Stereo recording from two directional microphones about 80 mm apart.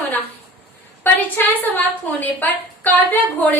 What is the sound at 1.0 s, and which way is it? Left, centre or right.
A woman's voice, left.